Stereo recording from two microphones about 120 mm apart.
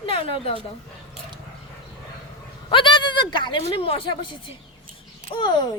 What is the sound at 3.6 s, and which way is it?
A woman's voice, 55° left (ahead or behind).